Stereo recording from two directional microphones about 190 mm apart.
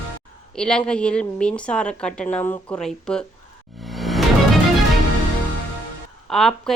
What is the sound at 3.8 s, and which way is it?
Music, centre (ahead or behind).